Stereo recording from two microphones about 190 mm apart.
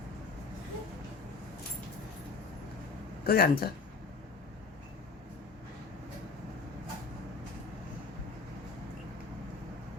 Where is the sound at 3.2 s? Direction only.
50° left (ahead or behind).